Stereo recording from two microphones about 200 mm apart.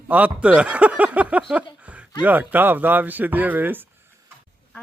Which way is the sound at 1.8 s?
5° right (ahead or behind).